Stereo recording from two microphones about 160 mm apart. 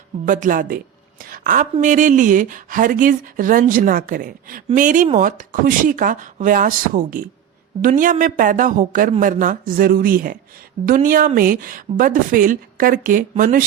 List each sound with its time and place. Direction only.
0.3 s speech: 55° right (ahead or behind)
1.2 s a sound: 60° right (ahead or behind)
1.8 s speech: 50° right (ahead or behind)